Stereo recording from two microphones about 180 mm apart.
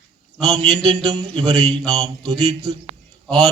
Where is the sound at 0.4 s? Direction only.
20° right (ahead or behind).